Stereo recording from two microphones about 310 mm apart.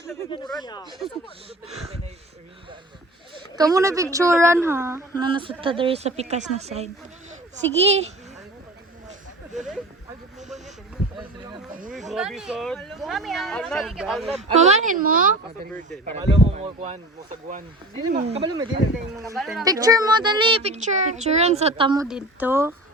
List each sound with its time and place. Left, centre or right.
0.6 s speech: centre
1.6 s speech: centre
3.5 s speech: centre
11.7 s a sound: right
12.1 s speech: centre
14.3 s speech: right
18.2 s speech: centre
19.4 s speech: centre
19.6 s speech: centre
22.0 s speech: centre